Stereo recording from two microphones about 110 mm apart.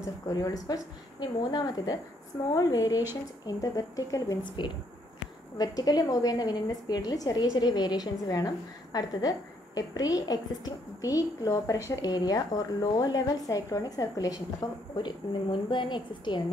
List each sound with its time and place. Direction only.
0.0 s a woman's voice: 30° left (ahead or behind)